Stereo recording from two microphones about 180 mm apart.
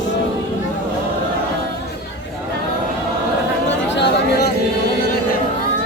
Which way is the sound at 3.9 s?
75° left (ahead or behind).